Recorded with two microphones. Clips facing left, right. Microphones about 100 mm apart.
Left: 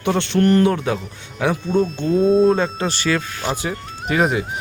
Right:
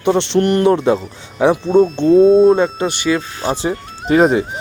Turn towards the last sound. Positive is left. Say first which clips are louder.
# right 7 dB
turn(degrees=-30)  # may be behind; listen again after turning